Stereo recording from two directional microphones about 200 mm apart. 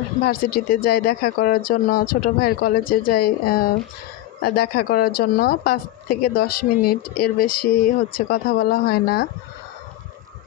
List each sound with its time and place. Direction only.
0.2 s a woman's voice: 45° left (ahead or behind)